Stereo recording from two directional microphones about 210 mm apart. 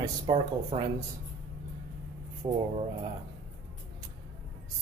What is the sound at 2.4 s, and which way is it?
Speech, 20° right (ahead or behind).